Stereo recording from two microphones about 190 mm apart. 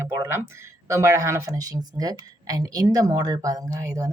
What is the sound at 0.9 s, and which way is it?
Speech, 15° right (ahead or behind).